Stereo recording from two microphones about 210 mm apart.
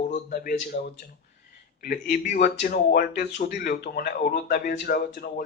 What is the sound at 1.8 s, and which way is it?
Speech, 40° left (ahead or behind).